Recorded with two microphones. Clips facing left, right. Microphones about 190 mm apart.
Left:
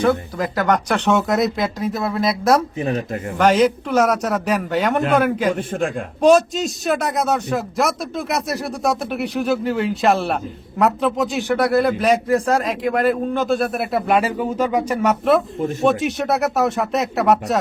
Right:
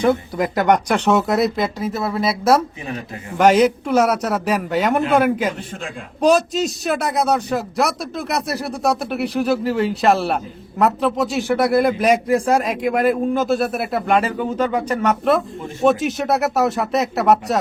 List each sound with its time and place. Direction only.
0.0 s speech: 15° right (ahead or behind)
1.0 s speech: centre (ahead or behind)
5.5 s a man's voice: 50° left (ahead or behind)
6.2 s speech: centre (ahead or behind)